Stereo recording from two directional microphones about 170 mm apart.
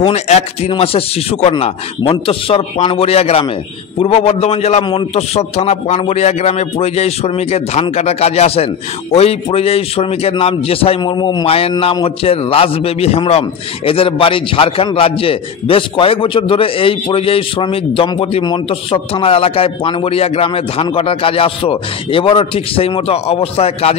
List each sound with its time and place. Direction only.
0.0 s a man's voice: 40° left (ahead or behind)